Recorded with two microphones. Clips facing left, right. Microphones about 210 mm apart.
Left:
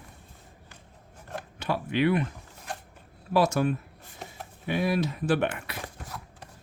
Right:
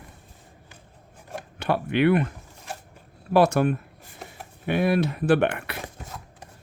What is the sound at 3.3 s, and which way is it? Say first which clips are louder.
Speech: right 4 dB; 60° right (ahead or behind).